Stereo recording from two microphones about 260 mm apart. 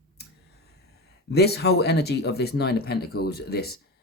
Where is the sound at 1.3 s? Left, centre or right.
Left.